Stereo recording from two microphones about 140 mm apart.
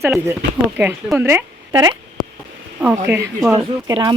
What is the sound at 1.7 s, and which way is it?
Speech, 30° right (ahead or behind).